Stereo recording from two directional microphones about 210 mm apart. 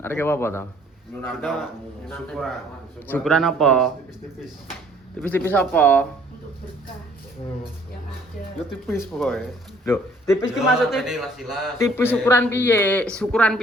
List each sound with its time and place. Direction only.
0.0 s a man's voice: 10° left (ahead or behind)
5.2 s speech: 10° left (ahead or behind)
9.1 s a man's voice: centre (ahead or behind)
9.8 s speech: 10° left (ahead or behind)
10.5 s a man's voice: centre (ahead or behind)
11.8 s speech: 10° left (ahead or behind)